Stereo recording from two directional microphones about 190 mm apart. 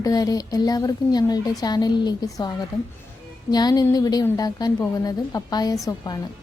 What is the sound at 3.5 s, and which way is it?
A woman's voice, 20° left (ahead or behind).